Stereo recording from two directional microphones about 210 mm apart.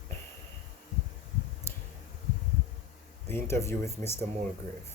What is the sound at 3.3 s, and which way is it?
Speech, 10° left (ahead or behind).